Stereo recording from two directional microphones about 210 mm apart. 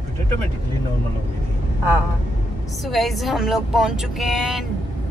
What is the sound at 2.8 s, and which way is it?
Speech, centre (ahead or behind).